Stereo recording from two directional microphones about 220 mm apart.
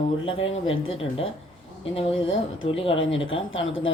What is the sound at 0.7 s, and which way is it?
Speech, 65° left (ahead or behind).